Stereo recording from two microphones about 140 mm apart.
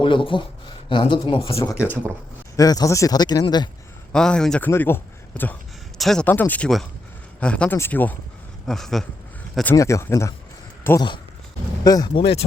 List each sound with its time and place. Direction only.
0.0 s speech: 35° left (ahead or behind)
1.6 s speech: 20° left (ahead or behind)
2.6 s speech: 25° left (ahead or behind)
4.1 s a man's voice: 5° left (ahead or behind)
6.0 s speech: centre (ahead or behind)
6.2 s speech: 10° left (ahead or behind)
8.6 s a man's voice: centre (ahead or behind)
9.7 s speech: 20° left (ahead or behind); by 12.5 s 45° left (ahead or behind)